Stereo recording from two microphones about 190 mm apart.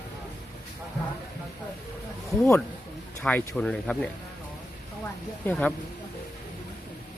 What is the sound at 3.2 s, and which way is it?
Speech, 5° left (ahead or behind).